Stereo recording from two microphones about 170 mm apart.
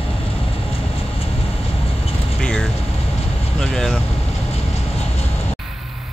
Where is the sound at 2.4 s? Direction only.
5° left (ahead or behind).